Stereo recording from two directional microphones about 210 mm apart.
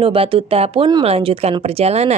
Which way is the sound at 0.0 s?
25° right (ahead or behind).